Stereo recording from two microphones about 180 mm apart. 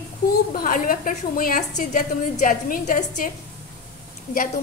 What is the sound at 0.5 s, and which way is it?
A woman's voice, 50° left (ahead or behind).